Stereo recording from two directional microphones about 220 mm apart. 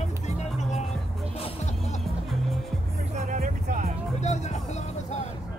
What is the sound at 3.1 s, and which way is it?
Music, 35° right (ahead or behind).